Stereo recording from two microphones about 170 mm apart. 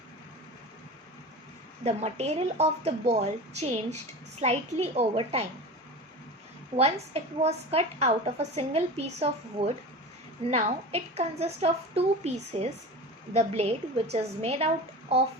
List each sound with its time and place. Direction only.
1.8 s a woman's voice: 40° right (ahead or behind)
6.7 s a woman's voice: 40° right (ahead or behind)